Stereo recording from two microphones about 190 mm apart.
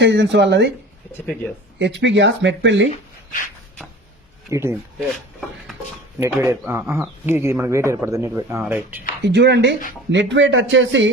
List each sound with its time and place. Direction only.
0.0 s speech: 70° right (ahead or behind)
1.8 s speech: 70° right (ahead or behind)
4.5 s speech: 15° right (ahead or behind)
4.9 s speech: 5° left (ahead or behind)
6.2 s speech: 15° right (ahead or behind)
9.2 s speech: 65° right (ahead or behind)